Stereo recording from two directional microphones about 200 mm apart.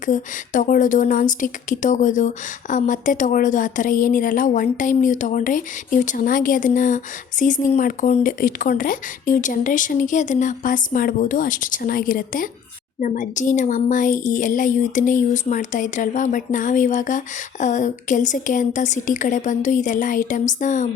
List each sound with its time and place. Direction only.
0.0 s a woman's voice: 40° left (ahead or behind)